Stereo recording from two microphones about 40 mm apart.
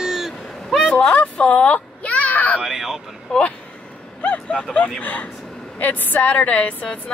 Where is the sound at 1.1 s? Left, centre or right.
Left.